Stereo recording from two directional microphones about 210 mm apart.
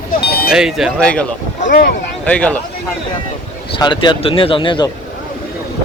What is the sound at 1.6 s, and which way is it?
Speech, 45° left (ahead or behind).